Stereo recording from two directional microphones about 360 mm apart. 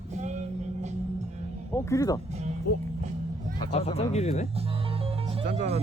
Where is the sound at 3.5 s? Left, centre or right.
Centre.